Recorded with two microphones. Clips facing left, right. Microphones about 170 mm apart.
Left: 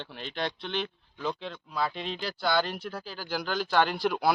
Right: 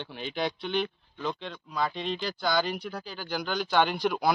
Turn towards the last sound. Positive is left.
turn(degrees=5)  # may be behind; listen again after turning